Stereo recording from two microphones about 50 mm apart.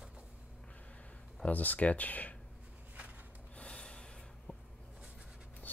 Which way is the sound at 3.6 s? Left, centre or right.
Left.